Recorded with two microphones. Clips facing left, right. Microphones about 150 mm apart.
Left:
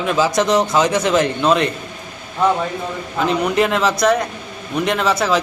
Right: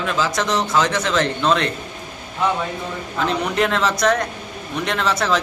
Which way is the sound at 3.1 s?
5° left (ahead or behind).